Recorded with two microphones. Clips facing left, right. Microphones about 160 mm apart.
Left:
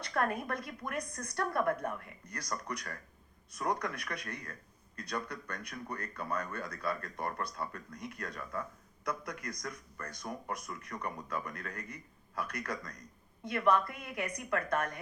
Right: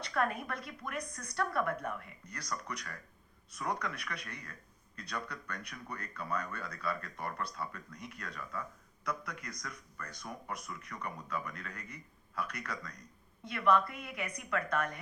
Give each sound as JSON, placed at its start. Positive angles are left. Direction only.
{"t": 0.0, "sound": "speech", "side_deg": 50}